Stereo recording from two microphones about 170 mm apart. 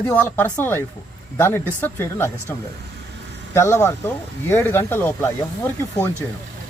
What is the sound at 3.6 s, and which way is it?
Speech, 15° left (ahead or behind).